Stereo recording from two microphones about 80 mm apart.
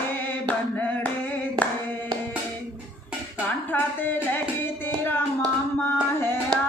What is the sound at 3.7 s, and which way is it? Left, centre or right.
Music, left.